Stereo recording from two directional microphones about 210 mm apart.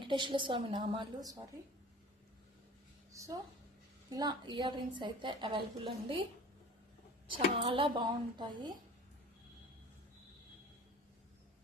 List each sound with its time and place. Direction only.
0.0 s a woman's voice: 20° right (ahead or behind)
3.1 s a woman's voice: 15° right (ahead or behind)
7.3 s a woman's voice: 25° right (ahead or behind)